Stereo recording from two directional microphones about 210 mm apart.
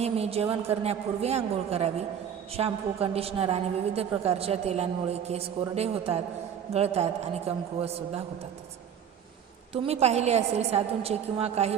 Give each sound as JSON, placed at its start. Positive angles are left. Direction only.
{"t": 0.0, "sound": "a woman's voice", "side_deg": -30}
{"t": 9.7, "sound": "a woman's voice", "side_deg": -30}